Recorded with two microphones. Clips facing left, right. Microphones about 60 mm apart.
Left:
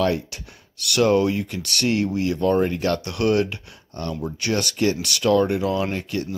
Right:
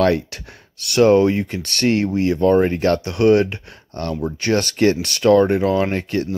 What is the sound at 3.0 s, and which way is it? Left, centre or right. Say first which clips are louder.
Speech: right 7 dB; right.